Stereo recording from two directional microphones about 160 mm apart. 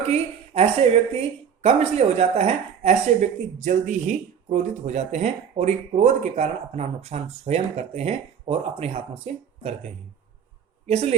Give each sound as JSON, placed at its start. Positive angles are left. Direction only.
{"t": 0.0, "sound": "speech", "side_deg": -40}
{"t": 10.8, "sound": "speech", "side_deg": -40}